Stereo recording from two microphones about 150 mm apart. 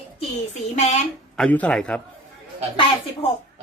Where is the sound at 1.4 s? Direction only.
10° left (ahead or behind).